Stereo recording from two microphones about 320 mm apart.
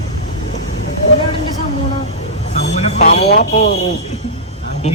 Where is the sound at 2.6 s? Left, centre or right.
Left.